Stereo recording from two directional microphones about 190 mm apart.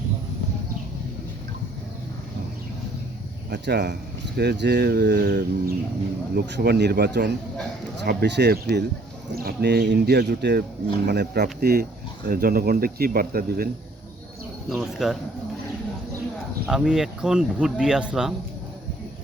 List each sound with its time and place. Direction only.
3.5 s speech: 65° right (ahead or behind)
14.7 s speech: centre (ahead or behind)
16.6 s speech: 5° right (ahead or behind)